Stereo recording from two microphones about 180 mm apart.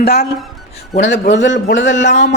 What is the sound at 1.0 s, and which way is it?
Speech, 75° left (ahead or behind).